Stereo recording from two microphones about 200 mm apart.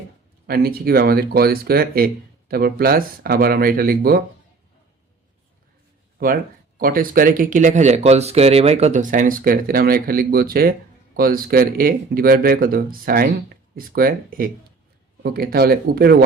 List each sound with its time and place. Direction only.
0.4 s speech: 50° right (ahead or behind)
6.1 s speech: 45° right (ahead or behind)